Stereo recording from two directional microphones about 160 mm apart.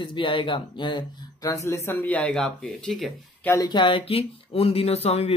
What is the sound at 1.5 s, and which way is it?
Speech, 15° left (ahead or behind).